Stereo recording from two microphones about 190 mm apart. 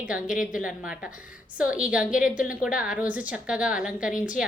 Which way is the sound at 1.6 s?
5° right (ahead or behind).